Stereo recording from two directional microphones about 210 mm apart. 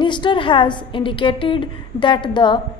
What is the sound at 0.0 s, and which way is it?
A woman's voice, 20° left (ahead or behind).